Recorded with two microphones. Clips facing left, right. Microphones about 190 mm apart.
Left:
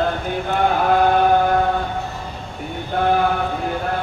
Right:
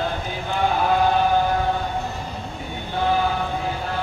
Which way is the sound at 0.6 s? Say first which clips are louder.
Left 3 dB; 55° left (ahead or behind).